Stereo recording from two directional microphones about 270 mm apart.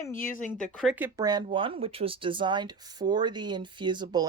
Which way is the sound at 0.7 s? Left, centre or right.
Centre.